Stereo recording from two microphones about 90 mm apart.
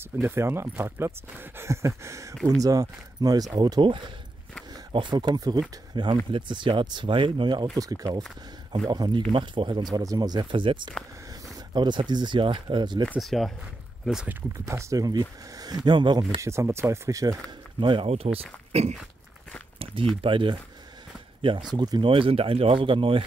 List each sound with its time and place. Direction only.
0.3 s speech: 30° right (ahead or behind); by 4.0 s 65° right (ahead or behind)
5.1 s speech: 50° right (ahead or behind)
7.7 s speech: 40° right (ahead or behind)
9.3 s speech: 65° right (ahead or behind); by 10.4 s 50° right (ahead or behind)
10.5 s speech: 70° right (ahead or behind)
11.7 s speech: 55° right (ahead or behind)
13.2 s speech: centre (ahead or behind)
14.6 s speech: 35° right (ahead or behind); by 16.3 s 60° right (ahead or behind)
16.3 s speech: 30° right (ahead or behind)
17.7 s speech: 70° right (ahead or behind); by 18.8 s 90° right
20.2 s speech: 70° right (ahead or behind)